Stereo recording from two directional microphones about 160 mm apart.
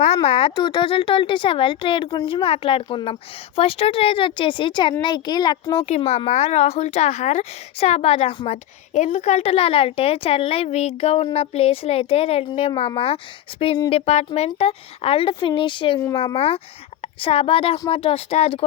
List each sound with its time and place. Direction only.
0.0 s speech: 40° left (ahead or behind); by 5.8 s 25° left (ahead or behind)
6.1 s speech: 45° left (ahead or behind)